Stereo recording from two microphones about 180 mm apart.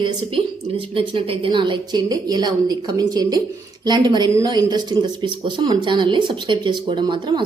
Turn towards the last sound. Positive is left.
turn(degrees=-25)  # may be behind; listen again after turning